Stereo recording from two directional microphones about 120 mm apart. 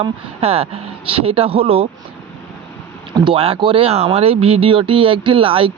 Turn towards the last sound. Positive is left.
turn(degrees=-50)  # may be behind; listen again after turning